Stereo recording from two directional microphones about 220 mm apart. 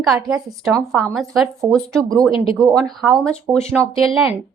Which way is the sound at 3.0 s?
Centre (ahead or behind).